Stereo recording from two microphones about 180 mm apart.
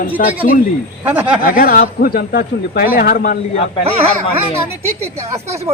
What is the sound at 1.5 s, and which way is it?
Speech, 55° left (ahead or behind).